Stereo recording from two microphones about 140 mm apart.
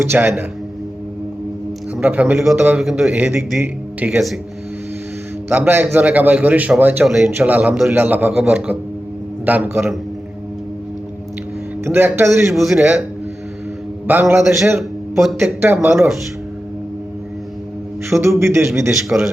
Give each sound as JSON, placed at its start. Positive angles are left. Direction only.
{"t": 0.0, "sound": "a man's voice", "side_deg": -15}
{"t": 2.0, "sound": "a man's voice", "side_deg": -10}
{"t": 5.5, "sound": "a man's voice", "side_deg": -15}
{"t": 7.3, "sound": "a man's voice", "side_deg": -15}
{"t": 11.9, "sound": "a man's voice", "side_deg": -15}
{"t": 12.5, "sound": "a man's voice", "side_deg": 0}
{"t": 14.1, "sound": "a man's voice", "side_deg": -15}
{"t": 14.8, "sound": "a sound", "side_deg": 0}
{"t": 15.6, "sound": "a man's voice", "side_deg": -15}
{"t": 18.2, "sound": "a man's voice", "side_deg": -20}